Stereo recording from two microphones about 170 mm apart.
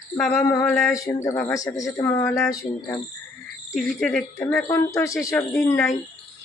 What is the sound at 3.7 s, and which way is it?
Speech, centre (ahead or behind).